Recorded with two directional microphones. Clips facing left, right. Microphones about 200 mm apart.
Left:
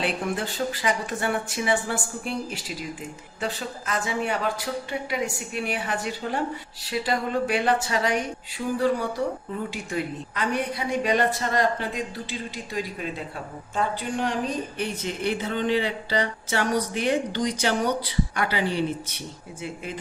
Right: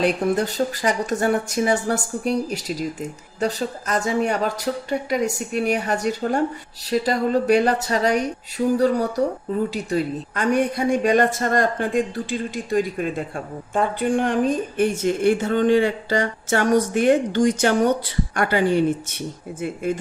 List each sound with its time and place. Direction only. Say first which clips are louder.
0.0 s a woman's voice: right 7 dB; 40° right (ahead or behind)